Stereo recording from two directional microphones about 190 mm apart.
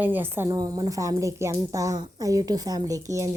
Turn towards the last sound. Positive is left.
turn(degrees=-15)  # may be behind; listen again after turning